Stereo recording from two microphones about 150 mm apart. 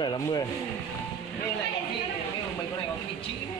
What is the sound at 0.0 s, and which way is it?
Speech, 30° left (ahead or behind).